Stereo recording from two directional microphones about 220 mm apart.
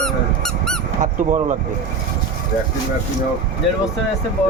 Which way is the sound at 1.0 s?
35° right (ahead or behind).